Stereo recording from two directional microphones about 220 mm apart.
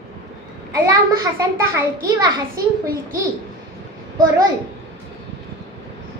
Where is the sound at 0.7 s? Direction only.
15° right (ahead or behind).